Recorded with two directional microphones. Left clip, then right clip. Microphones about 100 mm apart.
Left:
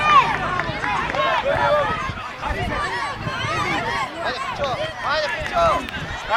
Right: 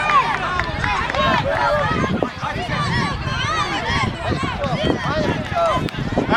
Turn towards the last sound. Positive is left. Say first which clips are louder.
# even
turn(degrees=20)  # may be behind; listen again after turning